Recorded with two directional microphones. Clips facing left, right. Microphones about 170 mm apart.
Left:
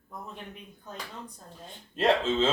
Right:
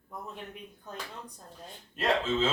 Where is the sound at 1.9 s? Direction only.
25° left (ahead or behind).